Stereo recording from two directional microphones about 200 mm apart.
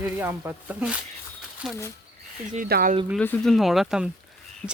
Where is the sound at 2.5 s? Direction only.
45° right (ahead or behind).